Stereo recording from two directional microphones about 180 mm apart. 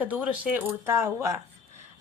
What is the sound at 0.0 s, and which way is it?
Speech, 10° right (ahead or behind).